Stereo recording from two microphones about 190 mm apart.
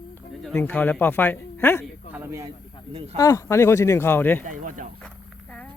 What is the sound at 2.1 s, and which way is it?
Snake, 10° right (ahead or behind).